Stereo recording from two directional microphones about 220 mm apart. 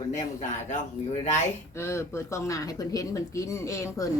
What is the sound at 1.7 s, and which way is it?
Speech, 10° left (ahead or behind).